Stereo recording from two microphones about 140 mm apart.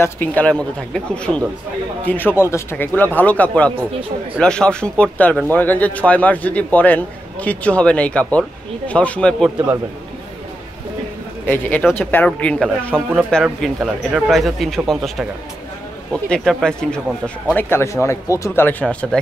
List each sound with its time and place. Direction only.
0.0 s a man's voice: 10° left (ahead or behind)
11.4 s a man's voice: 15° left (ahead or behind)
17.6 s a man's voice: 15° left (ahead or behind)